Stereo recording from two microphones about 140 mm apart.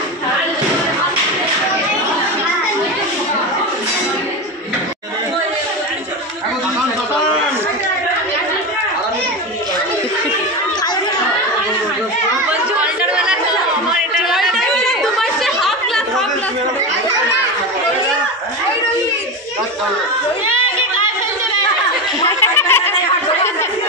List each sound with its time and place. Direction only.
12.4 s chatter: 5° right (ahead or behind)
22.2 s snicker: 20° left (ahead or behind)